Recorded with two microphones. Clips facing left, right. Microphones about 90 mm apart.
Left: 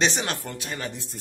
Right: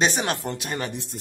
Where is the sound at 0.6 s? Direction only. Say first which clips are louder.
Right 3 dB; 60° right (ahead or behind).